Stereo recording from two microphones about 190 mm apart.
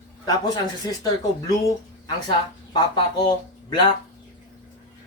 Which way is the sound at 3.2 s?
25° left (ahead or behind).